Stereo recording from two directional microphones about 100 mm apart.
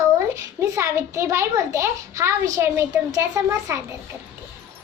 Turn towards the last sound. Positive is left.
turn(degrees=-25)  # may be behind; listen again after turning